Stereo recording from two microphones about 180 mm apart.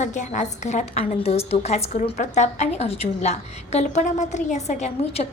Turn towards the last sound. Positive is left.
turn(degrees=35)  # may be behind; listen again after turning